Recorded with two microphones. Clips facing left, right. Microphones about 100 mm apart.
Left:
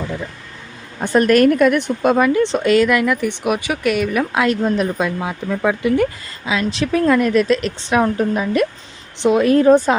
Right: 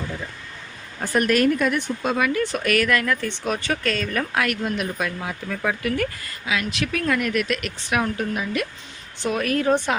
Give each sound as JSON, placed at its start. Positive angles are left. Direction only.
{"t": 1.0, "sound": "speech", "side_deg": 30}
{"t": 1.3, "sound": "a woman's voice", "side_deg": 55}
{"t": 2.3, "sound": "speech", "side_deg": 25}
{"t": 4.6, "sound": "speech", "side_deg": 35}
{"t": 5.0, "sound": "speech", "side_deg": 20}
{"t": 9.1, "sound": "speech", "side_deg": 20}